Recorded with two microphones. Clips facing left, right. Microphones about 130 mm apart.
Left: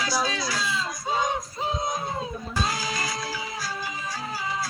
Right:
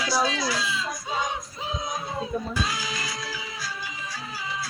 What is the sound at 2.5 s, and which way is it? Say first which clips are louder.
Music: left 2 dB; 40° left (ahead or behind).